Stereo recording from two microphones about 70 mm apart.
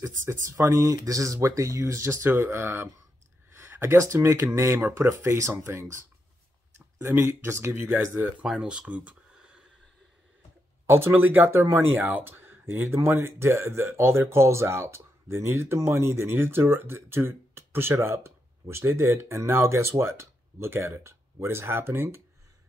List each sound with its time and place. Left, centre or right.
0.0 s speech: right
5.5 s speech: right
5.8 s speech: right
7.9 s speech: right
8.5 s speech: centre
10.9 s speech: right